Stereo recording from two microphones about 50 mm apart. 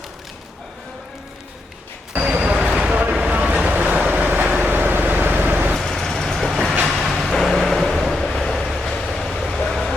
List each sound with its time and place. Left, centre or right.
2.1 s a sound: right
2.6 s vehicle: centre
2.9 s vehicle: right
4.6 s vehicle: right
5.7 s vehicle: centre